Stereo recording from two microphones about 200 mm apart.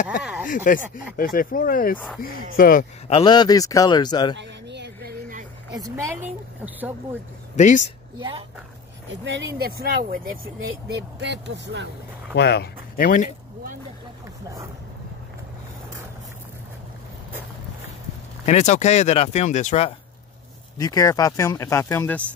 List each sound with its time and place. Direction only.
0.2 s a sound: 5° right (ahead or behind)
0.5 s speech: 45° left (ahead or behind)
3.1 s a man's voice: 25° left (ahead or behind)
4.4 s a sound: 60° right (ahead or behind)
7.5 s speech: 40° left (ahead or behind)
8.2 s speech: 25° right (ahead or behind)
9.1 s speech: 65° right (ahead or behind)
9.7 s speech: 50° right (ahead or behind)
12.4 s speech: 55° left (ahead or behind)
18.4 s speech: 35° left (ahead or behind)
20.7 s speech: 15° left (ahead or behind)